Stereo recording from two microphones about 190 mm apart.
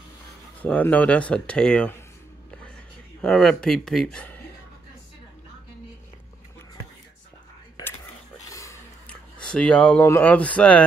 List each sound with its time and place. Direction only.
0.6 s speech: 10° left (ahead or behind)
3.2 s speech: 5° left (ahead or behind)
8.5 s a sound: 15° left (ahead or behind)
9.4 s speech: 5° left (ahead or behind)